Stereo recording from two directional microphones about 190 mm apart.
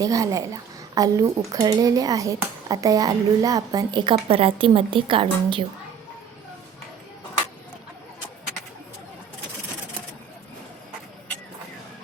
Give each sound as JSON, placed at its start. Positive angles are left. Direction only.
{"t": 0.0, "sound": "speech", "side_deg": -20}